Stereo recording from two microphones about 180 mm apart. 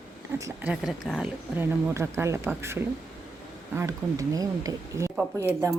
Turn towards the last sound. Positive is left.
turn(degrees=-15)  # may be behind; listen again after turning